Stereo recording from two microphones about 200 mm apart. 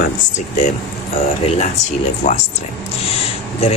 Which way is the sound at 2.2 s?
40° left (ahead or behind).